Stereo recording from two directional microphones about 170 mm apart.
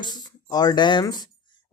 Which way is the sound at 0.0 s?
25° left (ahead or behind).